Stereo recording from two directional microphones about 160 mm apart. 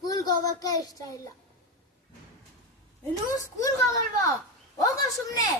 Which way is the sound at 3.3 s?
20° left (ahead or behind).